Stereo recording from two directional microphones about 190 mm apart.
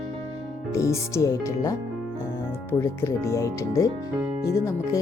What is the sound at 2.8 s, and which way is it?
Speech, 15° left (ahead or behind).